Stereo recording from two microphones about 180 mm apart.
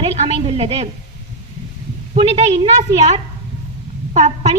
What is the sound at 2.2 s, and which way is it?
Speech, 30° right (ahead or behind).